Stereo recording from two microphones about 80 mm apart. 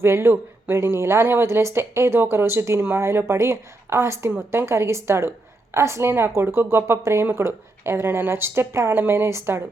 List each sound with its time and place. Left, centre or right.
0.0 s speech: right